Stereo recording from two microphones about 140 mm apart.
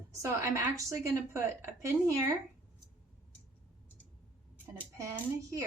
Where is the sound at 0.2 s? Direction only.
20° right (ahead or behind).